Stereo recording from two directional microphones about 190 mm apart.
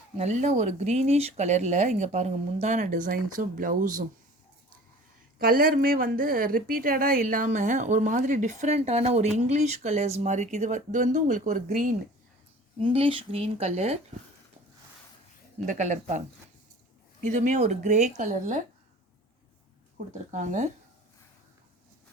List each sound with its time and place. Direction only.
0.2 s speech: 40° right (ahead or behind)
5.4 s a woman's voice: 50° right (ahead or behind)
12.8 s speech: 30° right (ahead or behind)
15.6 s speech: 40° right (ahead or behind)
17.2 s speech: 40° right (ahead or behind)
20.3 s speech: 40° right (ahead or behind)